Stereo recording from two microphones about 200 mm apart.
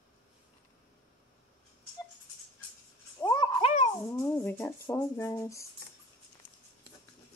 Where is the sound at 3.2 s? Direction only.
20° left (ahead or behind).